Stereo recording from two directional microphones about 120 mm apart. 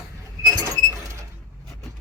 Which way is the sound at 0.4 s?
30° right (ahead or behind).